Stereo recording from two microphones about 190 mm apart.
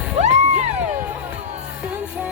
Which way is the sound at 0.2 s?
35° right (ahead or behind).